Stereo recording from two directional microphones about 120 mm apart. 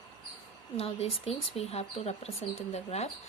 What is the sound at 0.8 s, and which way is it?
Speech, 60° left (ahead or behind).